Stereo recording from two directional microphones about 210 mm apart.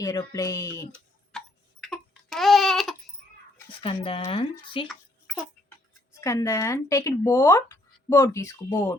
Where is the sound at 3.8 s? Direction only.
25° left (ahead or behind).